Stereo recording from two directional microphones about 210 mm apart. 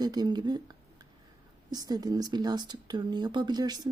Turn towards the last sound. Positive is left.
turn(degrees=-20)  # may be behind; listen again after turning